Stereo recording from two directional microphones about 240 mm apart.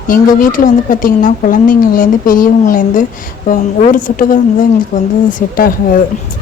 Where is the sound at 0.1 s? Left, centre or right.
Left.